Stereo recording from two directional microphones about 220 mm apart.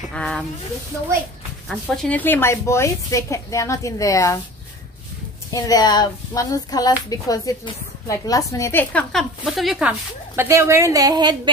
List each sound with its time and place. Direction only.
0.1 s a woman's voice: 5° left (ahead or behind)
1.7 s speech: 5° left (ahead or behind)
5.5 s a woman's voice: 15° left (ahead or behind); by 11.5 s 20° right (ahead or behind)